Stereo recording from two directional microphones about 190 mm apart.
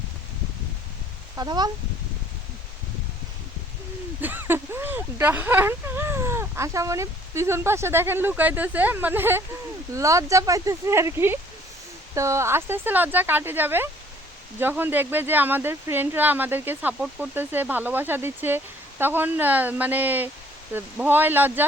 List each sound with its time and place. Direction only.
1.4 s speech: 20° right (ahead or behind)
4.2 s speech: 10° right (ahead or behind)